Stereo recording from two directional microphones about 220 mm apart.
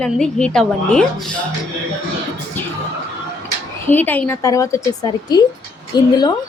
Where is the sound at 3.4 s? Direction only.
10° left (ahead or behind).